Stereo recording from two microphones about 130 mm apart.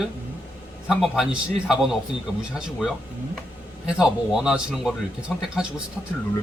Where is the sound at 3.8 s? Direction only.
5° right (ahead or behind).